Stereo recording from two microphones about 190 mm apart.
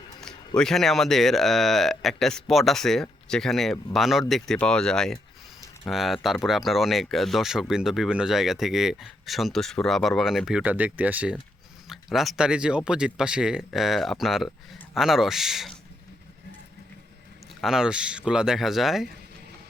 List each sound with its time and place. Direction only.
0.2 s speech: 5° left (ahead or behind)
17.6 s speech: 5° right (ahead or behind)